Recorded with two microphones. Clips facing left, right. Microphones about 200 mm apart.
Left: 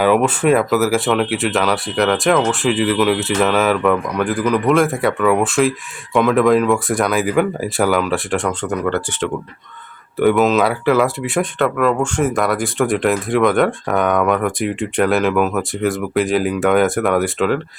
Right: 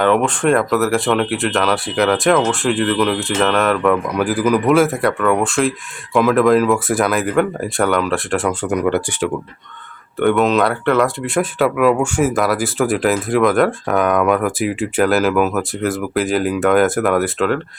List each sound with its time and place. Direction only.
0.0 s speech: 5° left (ahead or behind); by 9.3 s 10° right (ahead or behind)
10.2 s speech: centre (ahead or behind)